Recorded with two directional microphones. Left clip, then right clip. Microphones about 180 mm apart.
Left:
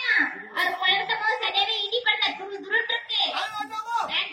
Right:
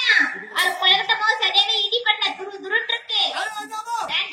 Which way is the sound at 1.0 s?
50° right (ahead or behind).